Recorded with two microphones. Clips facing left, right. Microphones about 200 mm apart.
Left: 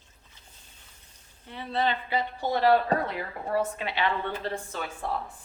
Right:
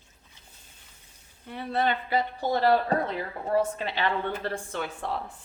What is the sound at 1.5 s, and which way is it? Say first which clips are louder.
Speech: right 1 dB; 50° right (ahead or behind).